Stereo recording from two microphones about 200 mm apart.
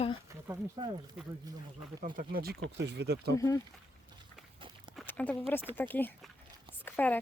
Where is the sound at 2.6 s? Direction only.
60° right (ahead or behind).